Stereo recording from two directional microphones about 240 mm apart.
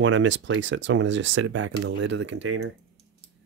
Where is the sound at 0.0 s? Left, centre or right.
Right.